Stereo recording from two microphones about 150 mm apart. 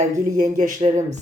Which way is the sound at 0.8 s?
50° right (ahead or behind).